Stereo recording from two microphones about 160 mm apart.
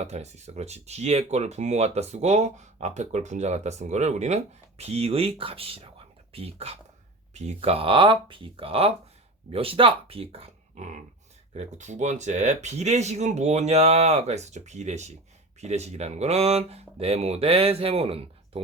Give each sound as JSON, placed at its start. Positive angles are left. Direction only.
{"t": 0.0, "sound": "speech", "side_deg": -45}